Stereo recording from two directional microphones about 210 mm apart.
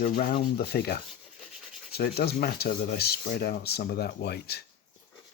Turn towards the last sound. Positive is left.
turn(degrees=50)  # may be behind; listen again after turning